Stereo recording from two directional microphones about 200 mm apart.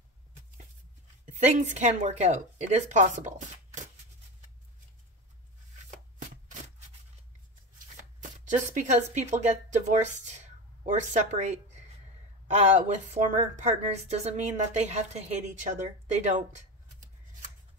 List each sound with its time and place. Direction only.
1.2 s speech: 35° right (ahead or behind)
5.9 s shuffling cards: 40° right (ahead or behind)
8.2 s speech: 40° right (ahead or behind)